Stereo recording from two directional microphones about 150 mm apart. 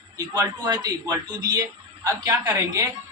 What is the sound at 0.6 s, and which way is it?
A man's voice, 25° right (ahead or behind).